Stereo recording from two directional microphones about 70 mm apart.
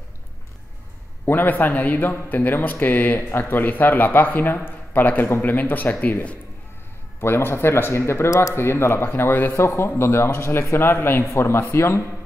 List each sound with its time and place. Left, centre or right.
1.2 s speech: left
7.2 s speech: left